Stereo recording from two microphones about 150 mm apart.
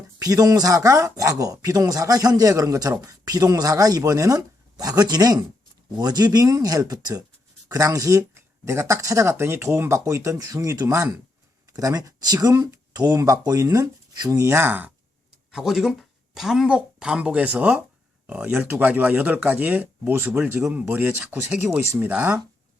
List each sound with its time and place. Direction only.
0.2 s speech: 25° right (ahead or behind)